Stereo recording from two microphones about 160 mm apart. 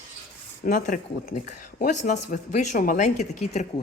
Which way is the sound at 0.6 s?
60° left (ahead or behind).